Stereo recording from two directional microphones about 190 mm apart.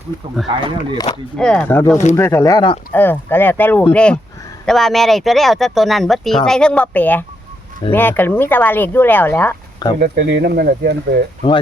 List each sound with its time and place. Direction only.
0.4 s speech: 25° right (ahead or behind)
1.4 s speech: 5° left (ahead or behind)
10.0 s speech: 55° right (ahead or behind)